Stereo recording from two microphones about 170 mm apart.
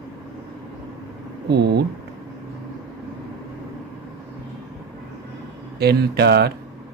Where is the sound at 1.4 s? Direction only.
70° right (ahead or behind).